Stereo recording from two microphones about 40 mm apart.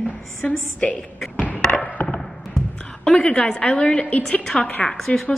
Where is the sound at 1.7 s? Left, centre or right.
Left.